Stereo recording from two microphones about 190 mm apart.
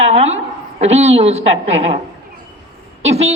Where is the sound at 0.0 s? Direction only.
35° right (ahead or behind).